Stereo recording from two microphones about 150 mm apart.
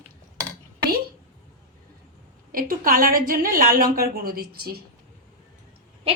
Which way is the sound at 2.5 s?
70° right (ahead or behind).